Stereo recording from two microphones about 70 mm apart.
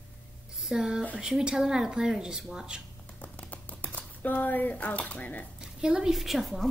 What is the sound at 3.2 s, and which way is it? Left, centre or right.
Typewriter, left.